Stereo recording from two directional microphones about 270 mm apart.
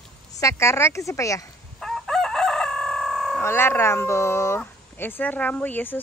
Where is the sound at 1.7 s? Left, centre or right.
Centre.